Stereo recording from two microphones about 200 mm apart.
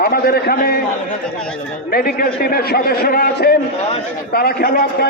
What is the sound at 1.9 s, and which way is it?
A man's voice, 50° left (ahead or behind).